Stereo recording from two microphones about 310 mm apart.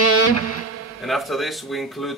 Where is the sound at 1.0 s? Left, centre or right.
Centre.